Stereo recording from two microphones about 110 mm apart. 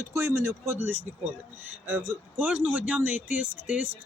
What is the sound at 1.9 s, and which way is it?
Speech, 20° right (ahead or behind).